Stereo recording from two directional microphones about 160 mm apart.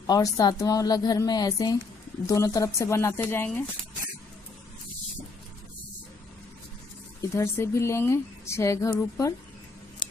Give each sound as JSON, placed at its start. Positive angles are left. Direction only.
{"t": 0.0, "sound": "a woman's voice", "side_deg": 25}
{"t": 7.2, "sound": "speech", "side_deg": 20}